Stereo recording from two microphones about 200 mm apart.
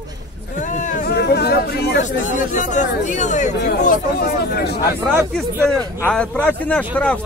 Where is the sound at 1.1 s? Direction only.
55° left (ahead or behind); by 3.5 s 35° left (ahead or behind).